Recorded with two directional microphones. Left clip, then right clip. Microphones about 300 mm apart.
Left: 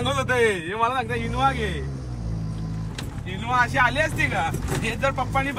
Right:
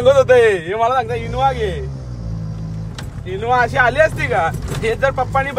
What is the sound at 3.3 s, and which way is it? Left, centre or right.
Speech, right.